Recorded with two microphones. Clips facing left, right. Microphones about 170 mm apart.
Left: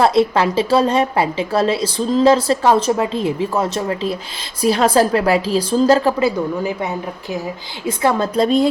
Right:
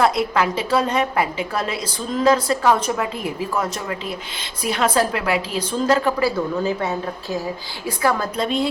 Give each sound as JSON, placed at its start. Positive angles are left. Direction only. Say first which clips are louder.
{"t": 0.0, "sound": "a woman's voice", "louder": "left 4 dB", "side_deg": 30}
{"t": 6.1, "sound": "a woman's voice", "louder": "left 3 dB", "side_deg": 20}
{"t": 8.4, "sound": "a woman's voice", "louder": "left 7 dB", "side_deg": 40}